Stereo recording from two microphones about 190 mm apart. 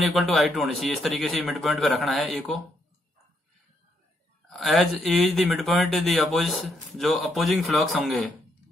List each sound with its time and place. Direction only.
0.1 s speech: centre (ahead or behind)
4.5 s speech: centre (ahead or behind)